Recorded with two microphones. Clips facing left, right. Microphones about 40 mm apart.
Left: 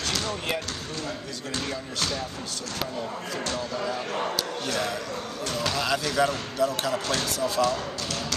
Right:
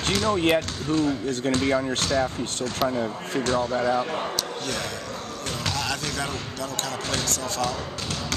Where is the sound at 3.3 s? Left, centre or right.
Right.